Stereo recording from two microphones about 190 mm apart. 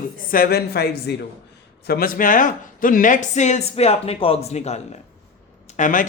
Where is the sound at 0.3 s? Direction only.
50° left (ahead or behind).